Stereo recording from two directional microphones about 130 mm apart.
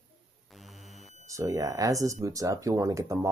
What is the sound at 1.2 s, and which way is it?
Speech, 25° right (ahead or behind).